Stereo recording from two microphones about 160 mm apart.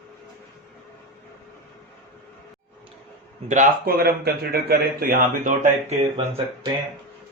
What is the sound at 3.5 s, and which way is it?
A man's voice, 55° right (ahead or behind).